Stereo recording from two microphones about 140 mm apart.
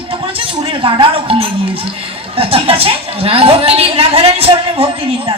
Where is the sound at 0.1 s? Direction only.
40° right (ahead or behind).